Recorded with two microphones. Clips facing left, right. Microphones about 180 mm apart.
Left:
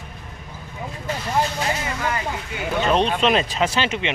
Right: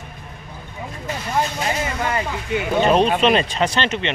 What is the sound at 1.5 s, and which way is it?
Speech, 25° right (ahead or behind).